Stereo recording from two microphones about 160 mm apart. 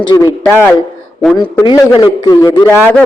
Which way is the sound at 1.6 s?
30° left (ahead or behind).